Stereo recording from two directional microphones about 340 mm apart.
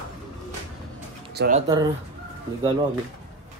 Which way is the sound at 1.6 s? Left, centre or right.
Centre.